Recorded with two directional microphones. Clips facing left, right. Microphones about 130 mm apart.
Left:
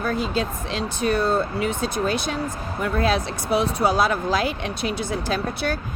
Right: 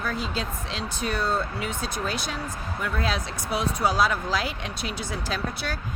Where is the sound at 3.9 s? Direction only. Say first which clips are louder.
Left 3 dB; 55° left (ahead or behind).